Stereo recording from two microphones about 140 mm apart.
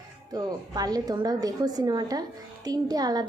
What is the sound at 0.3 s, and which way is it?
A woman's voice, 25° right (ahead or behind).